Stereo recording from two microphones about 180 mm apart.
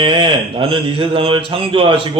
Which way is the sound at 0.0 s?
25° right (ahead or behind).